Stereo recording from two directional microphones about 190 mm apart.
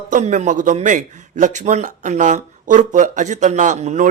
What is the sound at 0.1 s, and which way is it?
A man's voice, 40° right (ahead or behind).